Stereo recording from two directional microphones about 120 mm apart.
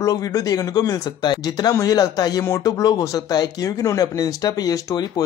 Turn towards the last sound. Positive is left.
turn(degrees=30)  # may be behind; listen again after turning